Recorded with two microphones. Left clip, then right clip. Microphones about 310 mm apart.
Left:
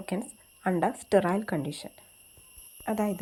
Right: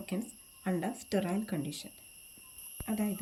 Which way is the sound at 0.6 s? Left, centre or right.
Centre.